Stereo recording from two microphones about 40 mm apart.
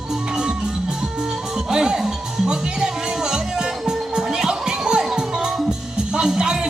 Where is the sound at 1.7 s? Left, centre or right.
Centre.